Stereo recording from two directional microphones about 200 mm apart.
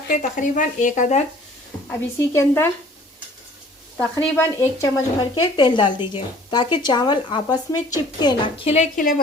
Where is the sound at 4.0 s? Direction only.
10° left (ahead or behind).